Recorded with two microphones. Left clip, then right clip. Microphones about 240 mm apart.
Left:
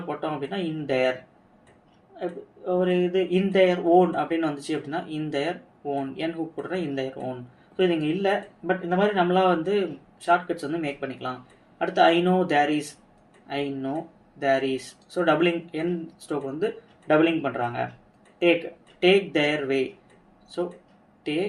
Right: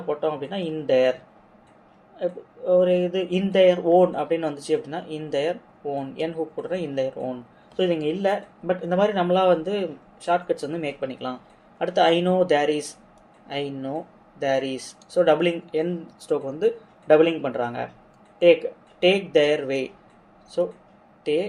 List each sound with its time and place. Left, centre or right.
0.2 s speech: right
2.1 s speech: right
18.9 s speech: right